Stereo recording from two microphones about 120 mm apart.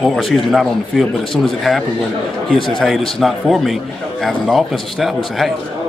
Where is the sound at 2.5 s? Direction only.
45° left (ahead or behind).